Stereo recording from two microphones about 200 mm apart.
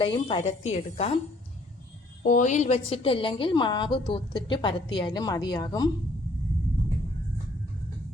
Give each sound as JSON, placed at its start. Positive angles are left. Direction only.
{"t": 0.0, "sound": "a woman's voice", "side_deg": 25}
{"t": 2.2, "sound": "a woman's voice", "side_deg": 40}